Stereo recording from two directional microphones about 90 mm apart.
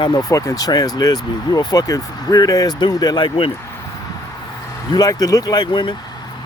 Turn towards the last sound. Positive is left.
turn(degrees=65)  # may be behind; listen again after turning